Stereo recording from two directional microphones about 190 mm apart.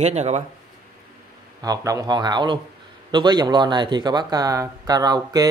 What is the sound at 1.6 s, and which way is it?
Speech, 20° right (ahead or behind).